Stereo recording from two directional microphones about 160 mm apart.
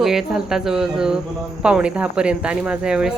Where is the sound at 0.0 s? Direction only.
Centre (ahead or behind).